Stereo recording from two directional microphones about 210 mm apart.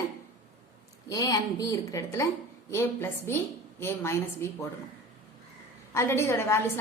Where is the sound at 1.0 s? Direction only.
15° left (ahead or behind).